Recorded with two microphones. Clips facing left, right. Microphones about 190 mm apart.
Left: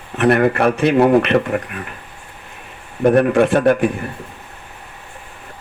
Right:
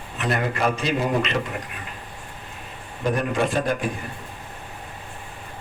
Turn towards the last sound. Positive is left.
turn(degrees=60)  # may be behind; listen again after turning